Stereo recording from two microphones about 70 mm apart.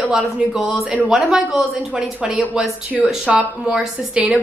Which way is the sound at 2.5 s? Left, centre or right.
Centre.